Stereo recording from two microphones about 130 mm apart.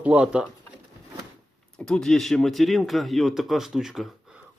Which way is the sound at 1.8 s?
5° left (ahead or behind).